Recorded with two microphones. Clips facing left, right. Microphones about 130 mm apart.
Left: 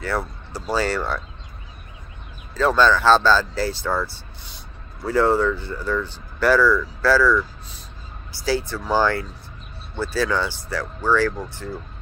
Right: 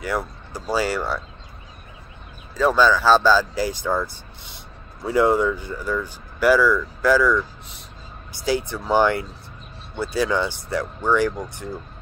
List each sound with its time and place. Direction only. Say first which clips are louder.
0.7 s speech: even; 10° right (ahead or behind)
2.5 s speech: even; 10° right (ahead or behind)